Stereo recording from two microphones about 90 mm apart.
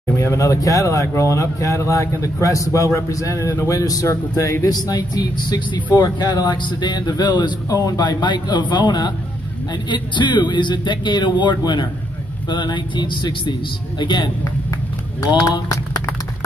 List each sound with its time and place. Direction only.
0.1 s speech: 30° left (ahead or behind); by 14.3 s 55° left (ahead or behind)